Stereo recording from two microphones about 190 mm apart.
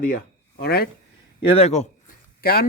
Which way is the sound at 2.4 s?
55° left (ahead or behind).